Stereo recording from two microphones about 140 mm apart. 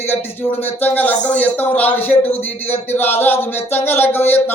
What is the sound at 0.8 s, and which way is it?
Speech, 10° left (ahead or behind).